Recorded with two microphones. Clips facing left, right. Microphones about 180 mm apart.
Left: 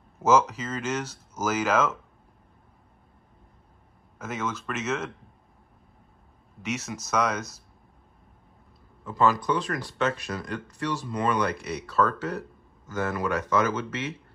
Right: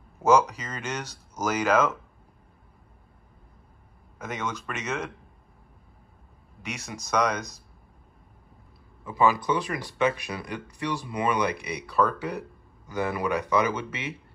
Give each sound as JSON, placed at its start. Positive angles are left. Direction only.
{"t": 0.2, "sound": "speech", "side_deg": 5}
{"t": 4.2, "sound": "speech", "side_deg": 5}
{"t": 6.7, "sound": "speech", "side_deg": 5}
{"t": 9.0, "sound": "speech", "side_deg": -10}